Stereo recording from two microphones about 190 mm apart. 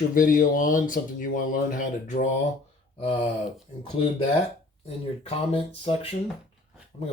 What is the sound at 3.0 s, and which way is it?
Speech, 30° left (ahead or behind).